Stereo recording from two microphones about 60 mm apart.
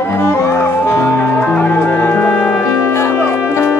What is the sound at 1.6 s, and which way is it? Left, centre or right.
Music, left.